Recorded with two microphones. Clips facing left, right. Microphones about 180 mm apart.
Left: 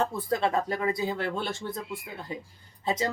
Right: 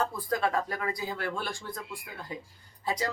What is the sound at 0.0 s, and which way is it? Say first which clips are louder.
Speech: left 2 dB; 25° left (ahead or behind).